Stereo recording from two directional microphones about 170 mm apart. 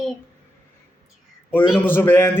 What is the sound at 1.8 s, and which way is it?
Speech, 10° left (ahead or behind).